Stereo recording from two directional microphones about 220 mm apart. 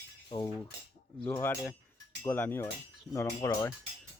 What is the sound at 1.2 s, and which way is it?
Speech, 10° left (ahead or behind).